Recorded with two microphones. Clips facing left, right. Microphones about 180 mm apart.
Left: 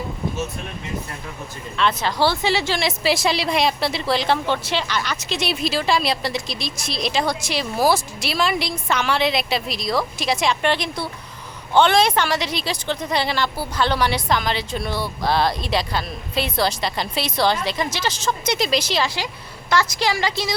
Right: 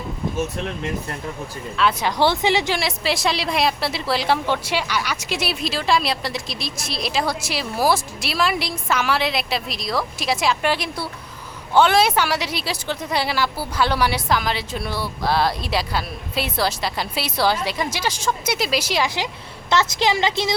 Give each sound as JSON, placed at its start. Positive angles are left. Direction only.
{"t": 1.7, "sound": "speech", "side_deg": -5}
{"t": 2.7, "sound": "a woman's voice", "side_deg": 0}